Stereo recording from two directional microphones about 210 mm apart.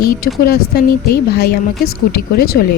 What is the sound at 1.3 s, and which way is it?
A woman's voice, 50° left (ahead or behind).